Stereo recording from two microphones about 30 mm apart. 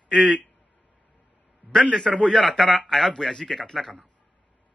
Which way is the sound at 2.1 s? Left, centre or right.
Left.